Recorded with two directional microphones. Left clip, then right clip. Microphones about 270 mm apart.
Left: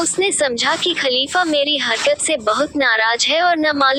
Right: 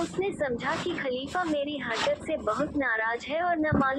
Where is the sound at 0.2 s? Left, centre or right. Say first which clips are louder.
Left 13 dB; left.